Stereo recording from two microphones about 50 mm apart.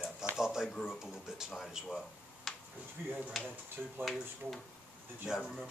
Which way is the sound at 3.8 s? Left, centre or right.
Right.